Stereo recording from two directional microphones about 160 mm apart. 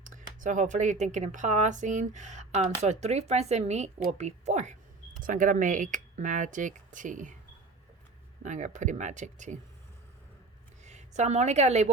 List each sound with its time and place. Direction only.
0.0 s speech: 55° right (ahead or behind)
8.4 s speech: 50° right (ahead or behind)
10.8 s a woman's voice: 45° right (ahead or behind)